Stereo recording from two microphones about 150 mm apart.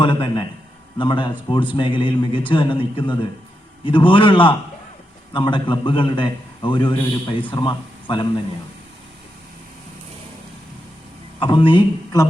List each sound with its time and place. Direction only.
0.0 s a man's voice: 35° left (ahead or behind)
11.3 s a man's voice: 30° left (ahead or behind)